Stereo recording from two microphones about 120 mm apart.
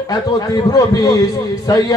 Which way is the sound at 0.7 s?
30° left (ahead or behind).